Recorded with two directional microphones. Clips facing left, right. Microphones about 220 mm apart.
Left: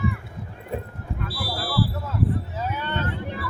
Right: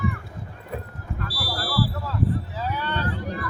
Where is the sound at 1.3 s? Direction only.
25° left (ahead or behind).